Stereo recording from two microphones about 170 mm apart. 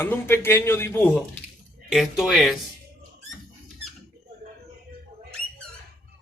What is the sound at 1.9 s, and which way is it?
Speech, centre (ahead or behind).